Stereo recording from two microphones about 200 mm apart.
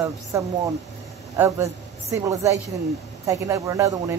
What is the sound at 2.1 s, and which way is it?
Speech, 15° right (ahead or behind).